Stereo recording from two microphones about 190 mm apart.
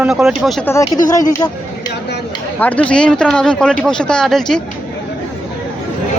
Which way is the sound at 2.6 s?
5° left (ahead or behind).